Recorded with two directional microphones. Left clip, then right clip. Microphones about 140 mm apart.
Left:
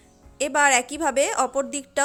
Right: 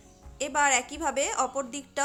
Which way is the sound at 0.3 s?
40° left (ahead or behind).